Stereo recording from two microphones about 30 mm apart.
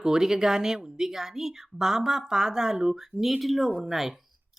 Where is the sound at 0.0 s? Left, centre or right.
Right.